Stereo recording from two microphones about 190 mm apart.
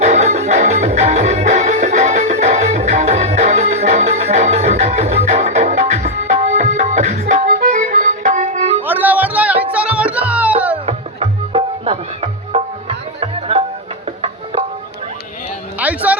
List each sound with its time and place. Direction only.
0.0 s music: 35° right (ahead or behind)
8.8 s music: 10° right (ahead or behind)
10.8 s music: 30° right (ahead or behind)
15.8 s music: 10° right (ahead or behind)